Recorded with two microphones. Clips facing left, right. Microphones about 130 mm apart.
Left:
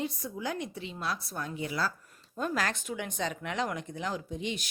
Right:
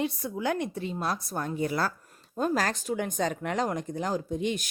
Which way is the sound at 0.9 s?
45° right (ahead or behind).